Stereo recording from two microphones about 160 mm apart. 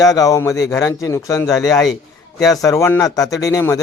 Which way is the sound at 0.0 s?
20° left (ahead or behind).